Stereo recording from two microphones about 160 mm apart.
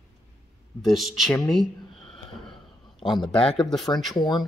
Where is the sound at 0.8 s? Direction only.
Centre (ahead or behind).